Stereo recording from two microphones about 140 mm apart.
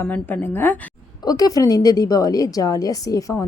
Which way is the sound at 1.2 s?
25° left (ahead or behind).